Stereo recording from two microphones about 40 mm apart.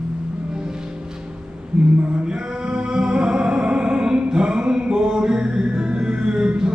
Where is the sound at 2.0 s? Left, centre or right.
Right.